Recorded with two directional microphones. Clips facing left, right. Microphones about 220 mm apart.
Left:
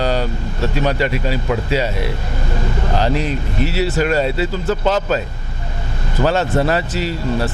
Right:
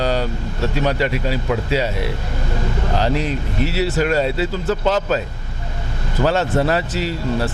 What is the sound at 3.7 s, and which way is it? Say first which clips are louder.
A man's voice: left 1 dB; 20° left (ahead or behind).